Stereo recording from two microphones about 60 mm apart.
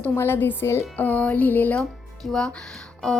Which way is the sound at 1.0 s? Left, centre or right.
Left.